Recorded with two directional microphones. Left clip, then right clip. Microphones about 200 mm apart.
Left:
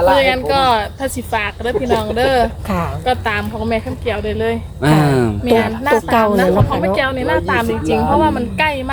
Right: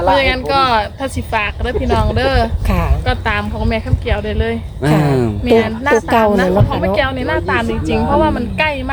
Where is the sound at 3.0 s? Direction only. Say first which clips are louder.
Left 1 dB; centre (ahead or behind).